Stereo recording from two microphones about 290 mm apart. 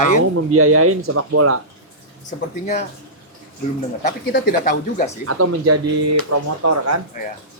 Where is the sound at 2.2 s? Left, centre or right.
Left.